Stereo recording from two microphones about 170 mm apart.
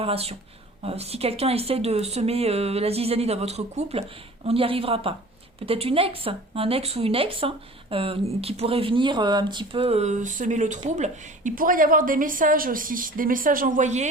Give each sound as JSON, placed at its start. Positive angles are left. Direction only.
{"t": 0.0, "sound": "speech", "side_deg": -35}